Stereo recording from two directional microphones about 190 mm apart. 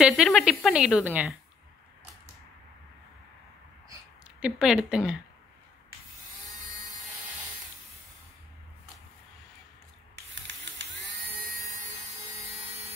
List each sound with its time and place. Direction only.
0.0 s a woman's voice: centre (ahead or behind)
4.4 s a woman's voice: 5° right (ahead or behind)
10.5 s a sound: 70° right (ahead or behind)